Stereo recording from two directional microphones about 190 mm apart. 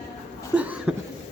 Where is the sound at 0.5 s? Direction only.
10° right (ahead or behind).